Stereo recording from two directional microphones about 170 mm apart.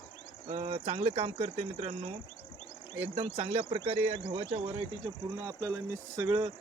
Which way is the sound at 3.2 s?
35° right (ahead or behind).